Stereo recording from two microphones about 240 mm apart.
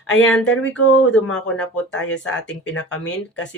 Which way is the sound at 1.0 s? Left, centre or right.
Centre.